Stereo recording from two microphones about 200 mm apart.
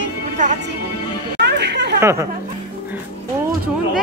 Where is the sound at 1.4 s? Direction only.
60° right (ahead or behind).